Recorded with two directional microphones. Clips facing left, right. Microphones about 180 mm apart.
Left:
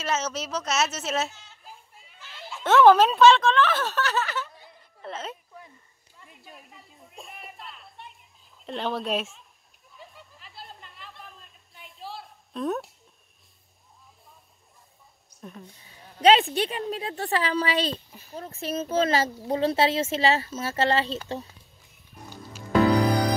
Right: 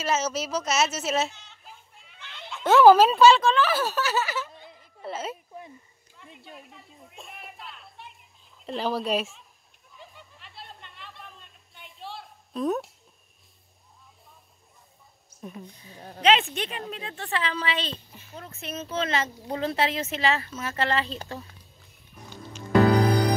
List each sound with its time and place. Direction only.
0.0 s speech: centre (ahead or behind)
4.5 s a sound: 20° right (ahead or behind)
5.0 s speech: 5° right (ahead or behind)
6.4 s speech: centre (ahead or behind)
9.9 s a sound: centre (ahead or behind)
16.2 s a woman's voice: 35° left (ahead or behind)